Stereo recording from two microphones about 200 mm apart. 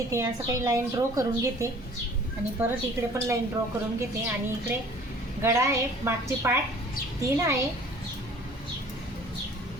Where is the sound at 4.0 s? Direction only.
10° right (ahead or behind).